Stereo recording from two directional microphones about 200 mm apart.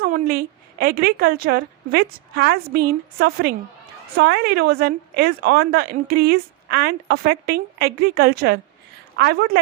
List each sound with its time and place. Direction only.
0.0 s a woman's voice: 50° right (ahead or behind)